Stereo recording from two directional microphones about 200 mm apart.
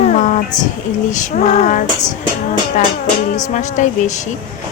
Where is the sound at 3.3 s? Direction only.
35° left (ahead or behind).